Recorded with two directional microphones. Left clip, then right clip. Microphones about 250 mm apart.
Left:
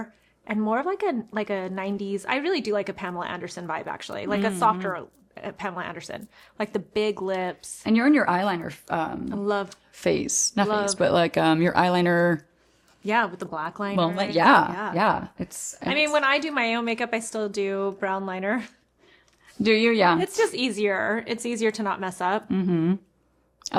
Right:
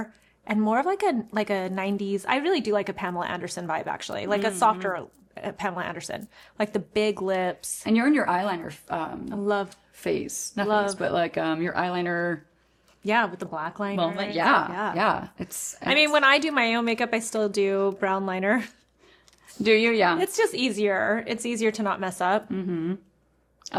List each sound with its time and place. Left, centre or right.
0.0 s a woman's voice: centre
7.9 s speech: left
9.2 s a woman's voice: centre
9.6 s speech: left
13.1 s a woman's voice: centre
14.2 s speech: left
14.7 s a woman's voice: centre
14.9 s a woman's voice: left
15.9 s a woman's voice: centre
19.6 s a woman's voice: left
20.1 s a woman's voice: centre
22.4 s speech: left
23.6 s a sound: left